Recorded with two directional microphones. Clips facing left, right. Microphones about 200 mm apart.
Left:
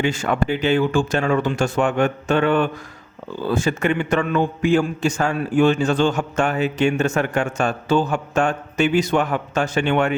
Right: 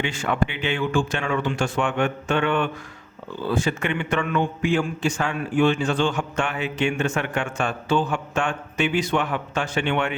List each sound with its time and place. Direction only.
0.0 s a man's voice: 40° left (ahead or behind)